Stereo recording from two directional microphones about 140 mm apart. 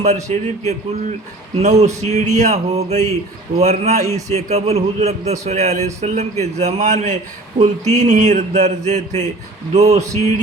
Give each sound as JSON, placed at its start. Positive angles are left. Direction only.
{"t": 0.3, "sound": "speech", "side_deg": -50}